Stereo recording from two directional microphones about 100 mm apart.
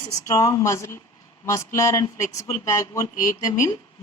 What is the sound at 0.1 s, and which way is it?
Speech, 35° left (ahead or behind).